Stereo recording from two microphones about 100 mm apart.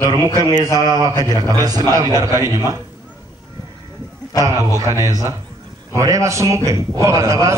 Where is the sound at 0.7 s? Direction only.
40° right (ahead or behind).